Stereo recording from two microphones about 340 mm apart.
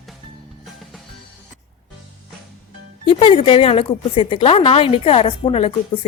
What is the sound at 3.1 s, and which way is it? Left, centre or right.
A woman's voice, centre.